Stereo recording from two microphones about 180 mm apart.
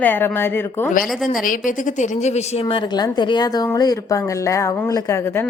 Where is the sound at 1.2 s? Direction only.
50° left (ahead or behind); by 5.4 s 15° left (ahead or behind).